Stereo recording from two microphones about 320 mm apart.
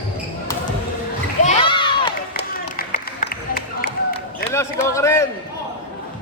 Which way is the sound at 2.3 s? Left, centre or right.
Left.